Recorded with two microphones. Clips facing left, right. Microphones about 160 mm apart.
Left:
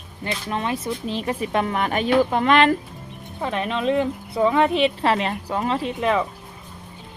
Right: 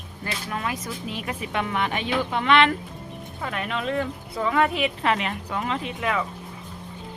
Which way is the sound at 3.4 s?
25° left (ahead or behind).